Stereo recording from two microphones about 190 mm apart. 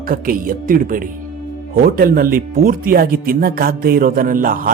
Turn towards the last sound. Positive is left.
turn(degrees=-45)  # may be behind; listen again after turning